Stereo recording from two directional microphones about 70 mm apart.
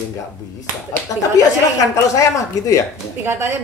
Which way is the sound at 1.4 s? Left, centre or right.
Left.